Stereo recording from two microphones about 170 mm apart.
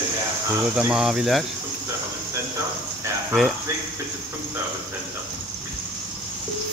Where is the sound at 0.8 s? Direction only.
5° right (ahead or behind).